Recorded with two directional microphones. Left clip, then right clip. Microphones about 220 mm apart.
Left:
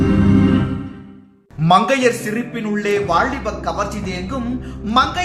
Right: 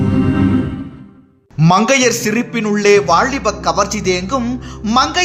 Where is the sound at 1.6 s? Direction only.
50° right (ahead or behind).